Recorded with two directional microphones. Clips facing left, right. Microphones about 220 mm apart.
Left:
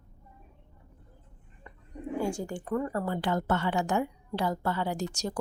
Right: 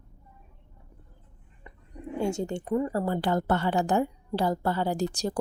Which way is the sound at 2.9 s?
35° right (ahead or behind).